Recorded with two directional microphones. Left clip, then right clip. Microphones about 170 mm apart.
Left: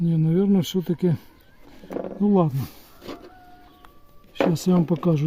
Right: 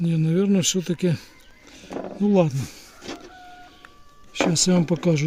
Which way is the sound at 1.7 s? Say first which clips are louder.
Left 1 dB; 40° left (ahead or behind).